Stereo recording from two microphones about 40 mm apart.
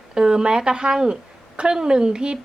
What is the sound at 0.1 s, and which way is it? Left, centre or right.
A woman's voice, right.